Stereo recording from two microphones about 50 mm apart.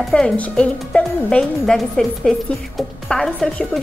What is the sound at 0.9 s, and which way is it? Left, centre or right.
Speech, left.